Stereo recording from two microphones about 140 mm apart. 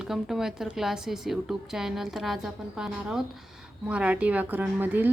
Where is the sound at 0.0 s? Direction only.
5° right (ahead or behind).